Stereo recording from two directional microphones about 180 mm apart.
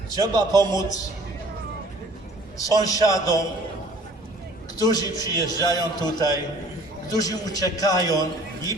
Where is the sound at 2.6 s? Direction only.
20° left (ahead or behind).